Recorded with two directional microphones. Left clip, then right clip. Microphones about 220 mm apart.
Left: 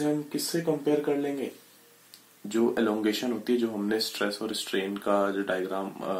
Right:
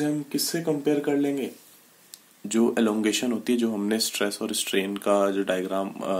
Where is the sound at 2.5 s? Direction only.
40° right (ahead or behind).